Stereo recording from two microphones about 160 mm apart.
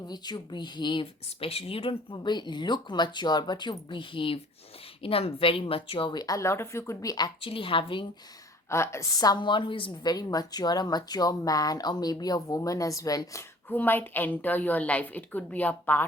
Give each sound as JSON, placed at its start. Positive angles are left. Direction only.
{"t": 0.1, "sound": "a woman's voice", "side_deg": 25}
{"t": 7.4, "sound": "a woman's voice", "side_deg": 35}
{"t": 8.7, "sound": "a woman's voice", "side_deg": 15}